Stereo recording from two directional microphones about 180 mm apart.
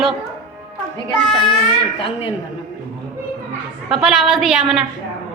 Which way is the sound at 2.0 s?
30° left (ahead or behind).